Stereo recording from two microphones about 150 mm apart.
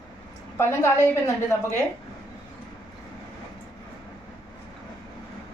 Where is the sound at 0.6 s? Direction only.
15° left (ahead or behind).